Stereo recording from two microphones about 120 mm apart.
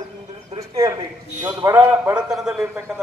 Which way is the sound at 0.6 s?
25° right (ahead or behind).